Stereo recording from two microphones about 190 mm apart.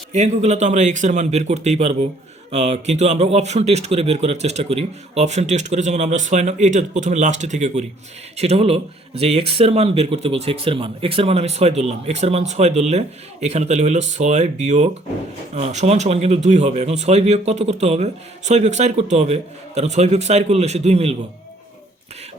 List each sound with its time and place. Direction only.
0.1 s speech: 35° right (ahead or behind)